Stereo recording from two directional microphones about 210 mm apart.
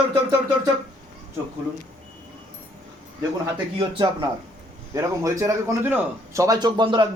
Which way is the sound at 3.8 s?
20° right (ahead or behind).